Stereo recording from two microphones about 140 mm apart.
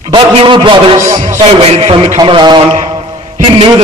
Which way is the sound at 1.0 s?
55° right (ahead or behind).